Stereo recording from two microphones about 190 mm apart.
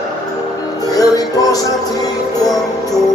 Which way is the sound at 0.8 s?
20° left (ahead or behind).